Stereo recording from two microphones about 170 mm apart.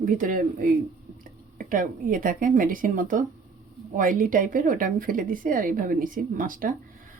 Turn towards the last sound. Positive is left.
turn(degrees=-55)  # may be behind; listen again after turning